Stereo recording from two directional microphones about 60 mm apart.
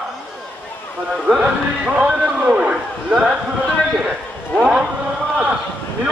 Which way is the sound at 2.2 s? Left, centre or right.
Centre.